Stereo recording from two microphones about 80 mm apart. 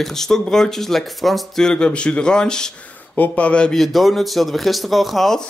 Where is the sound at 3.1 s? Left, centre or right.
Centre.